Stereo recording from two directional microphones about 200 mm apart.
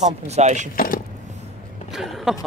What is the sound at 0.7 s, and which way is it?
Speech, 45° left (ahead or behind).